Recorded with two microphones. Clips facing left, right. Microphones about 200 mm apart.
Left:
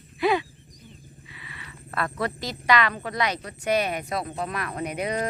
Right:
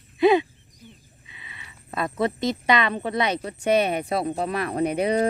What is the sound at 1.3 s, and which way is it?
Speech, 20° right (ahead or behind).